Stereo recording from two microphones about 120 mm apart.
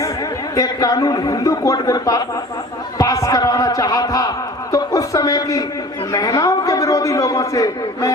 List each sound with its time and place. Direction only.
0.5 s a man's voice: 30° left (ahead or behind)
4.7 s a sound: 30° left (ahead or behind)
6.1 s a man's voice: 30° left (ahead or behind)